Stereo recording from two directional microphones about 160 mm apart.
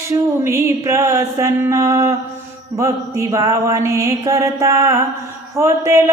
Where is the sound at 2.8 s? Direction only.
20° right (ahead or behind).